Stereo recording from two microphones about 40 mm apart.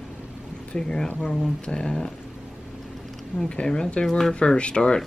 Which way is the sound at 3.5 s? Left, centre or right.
Left.